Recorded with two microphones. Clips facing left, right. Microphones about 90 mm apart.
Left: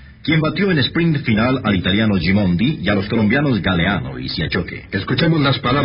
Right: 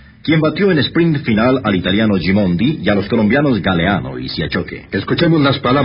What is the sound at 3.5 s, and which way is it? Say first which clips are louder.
Speech: right 3 dB; 45° right (ahead or behind).